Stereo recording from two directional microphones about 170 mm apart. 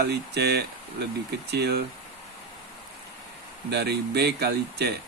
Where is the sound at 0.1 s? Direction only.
75° right (ahead or behind).